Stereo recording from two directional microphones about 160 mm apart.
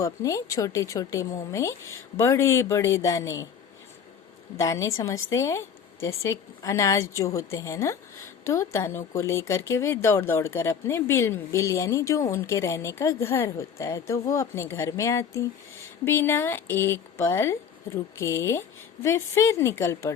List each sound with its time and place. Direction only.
0.0 s speech: 20° left (ahead or behind)
4.5 s speech: 20° left (ahead or behind)